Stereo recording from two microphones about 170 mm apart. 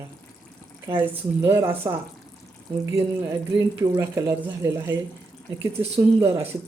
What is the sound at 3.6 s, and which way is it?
Speech, 15° right (ahead or behind).